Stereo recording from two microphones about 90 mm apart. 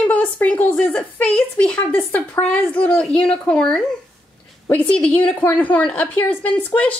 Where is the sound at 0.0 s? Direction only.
15° left (ahead or behind).